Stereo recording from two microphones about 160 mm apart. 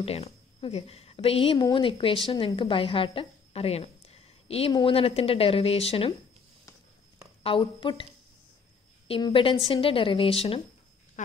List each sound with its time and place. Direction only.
0.0 s a woman's voice: 40° left (ahead or behind)
7.4 s speech: 30° left (ahead or behind)
11.2 s speech: 50° left (ahead or behind)